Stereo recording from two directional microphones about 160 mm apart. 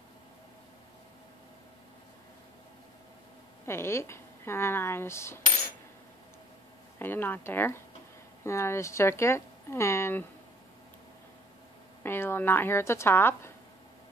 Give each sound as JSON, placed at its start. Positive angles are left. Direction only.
{"t": 3.6, "sound": "speech", "side_deg": 15}
{"t": 7.0, "sound": "speech", "side_deg": 10}
{"t": 12.0, "sound": "speech", "side_deg": 15}